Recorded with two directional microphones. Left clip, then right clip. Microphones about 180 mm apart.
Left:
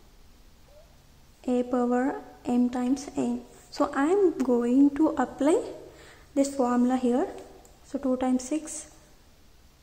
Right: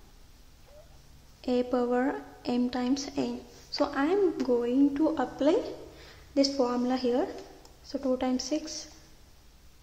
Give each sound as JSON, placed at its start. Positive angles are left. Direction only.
{"t": 1.4, "sound": "a woman's voice", "side_deg": 15}